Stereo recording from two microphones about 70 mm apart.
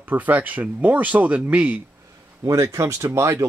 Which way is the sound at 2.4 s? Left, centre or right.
Right.